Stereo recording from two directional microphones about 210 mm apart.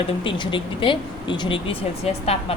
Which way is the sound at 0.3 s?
25° left (ahead or behind).